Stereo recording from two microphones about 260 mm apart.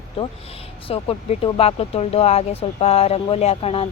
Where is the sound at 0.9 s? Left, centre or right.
Left.